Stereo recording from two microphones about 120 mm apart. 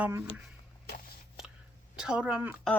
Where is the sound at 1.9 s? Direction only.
5° right (ahead or behind).